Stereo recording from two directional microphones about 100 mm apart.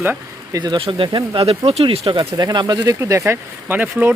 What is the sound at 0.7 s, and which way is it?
Speech, 60° right (ahead or behind).